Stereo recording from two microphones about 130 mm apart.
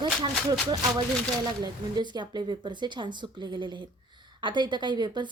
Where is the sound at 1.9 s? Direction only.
35° right (ahead or behind).